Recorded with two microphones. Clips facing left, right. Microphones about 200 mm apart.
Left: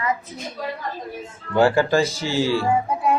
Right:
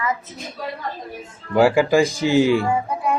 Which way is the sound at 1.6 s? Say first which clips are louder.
Right 2 dB; 10° right (ahead or behind).